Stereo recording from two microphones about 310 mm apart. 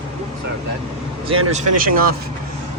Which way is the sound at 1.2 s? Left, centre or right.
Centre.